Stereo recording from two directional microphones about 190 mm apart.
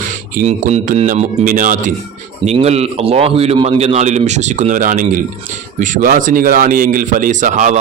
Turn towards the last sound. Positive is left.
turn(degrees=-40)  # may be behind; listen again after turning